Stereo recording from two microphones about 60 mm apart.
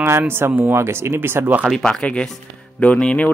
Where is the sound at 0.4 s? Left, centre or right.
Right.